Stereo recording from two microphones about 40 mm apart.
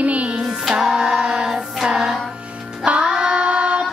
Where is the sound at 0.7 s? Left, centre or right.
Centre.